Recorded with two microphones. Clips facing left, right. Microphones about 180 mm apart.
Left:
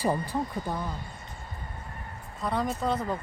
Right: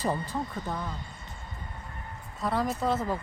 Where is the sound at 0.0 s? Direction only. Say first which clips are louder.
Left 2 dB; 10° left (ahead or behind).